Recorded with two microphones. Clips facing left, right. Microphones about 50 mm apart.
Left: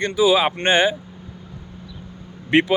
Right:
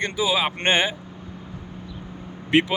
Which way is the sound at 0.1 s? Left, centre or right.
Centre.